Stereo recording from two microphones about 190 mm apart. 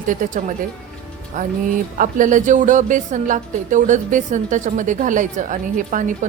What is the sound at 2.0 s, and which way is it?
A woman's voice, 45° right (ahead or behind).